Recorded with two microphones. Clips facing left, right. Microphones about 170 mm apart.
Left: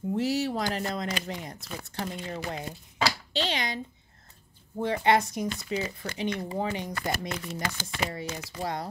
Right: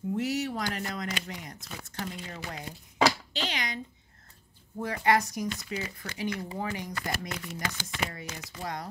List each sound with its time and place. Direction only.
0.1 s speech: 30° left (ahead or behind)